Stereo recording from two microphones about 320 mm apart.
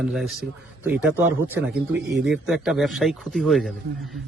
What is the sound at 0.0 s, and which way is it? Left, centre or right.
Speech, centre.